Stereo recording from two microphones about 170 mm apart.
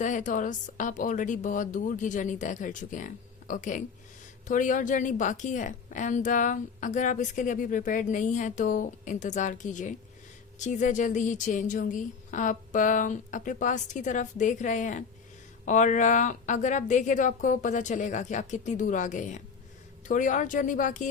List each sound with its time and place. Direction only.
0.0 s a woman's voice: 45° left (ahead or behind)